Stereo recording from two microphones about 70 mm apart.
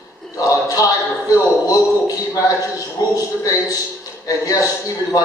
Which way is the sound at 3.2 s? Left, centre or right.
Left.